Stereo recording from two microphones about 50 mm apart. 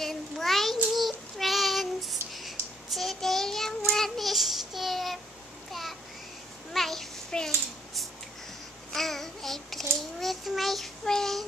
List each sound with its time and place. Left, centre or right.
0.0 s child singing: centre
5.7 s a sound: centre
8.9 s child singing: centre